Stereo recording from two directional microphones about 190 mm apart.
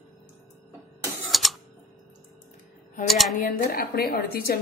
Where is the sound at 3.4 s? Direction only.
50° left (ahead or behind).